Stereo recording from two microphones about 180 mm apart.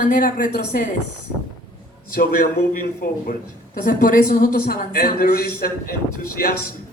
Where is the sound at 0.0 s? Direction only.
50° left (ahead or behind).